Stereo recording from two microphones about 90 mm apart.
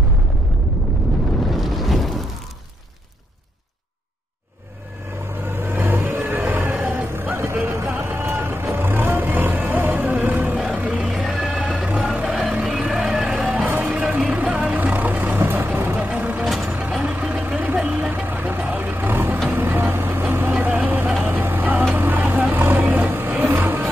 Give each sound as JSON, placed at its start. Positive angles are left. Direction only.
{"t": 1.4, "sound": "boat", "side_deg": 0}
{"t": 5.5, "sound": "vehicle", "side_deg": -25}
{"t": 16.4, "sound": "vehicle", "side_deg": 0}
{"t": 16.7, "sound": "vehicle", "side_deg": -15}